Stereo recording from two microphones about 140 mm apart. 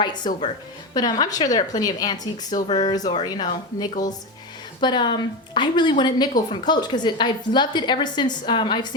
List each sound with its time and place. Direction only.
0.0 s a woman's voice: 30° left (ahead or behind)